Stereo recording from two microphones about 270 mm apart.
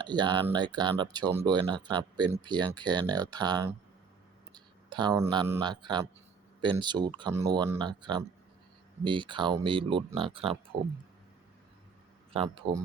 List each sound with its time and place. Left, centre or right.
0.0 s speech: centre
12.3 s speech: centre